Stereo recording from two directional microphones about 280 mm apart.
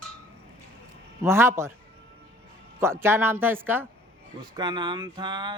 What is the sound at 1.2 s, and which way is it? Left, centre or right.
Speech, centre.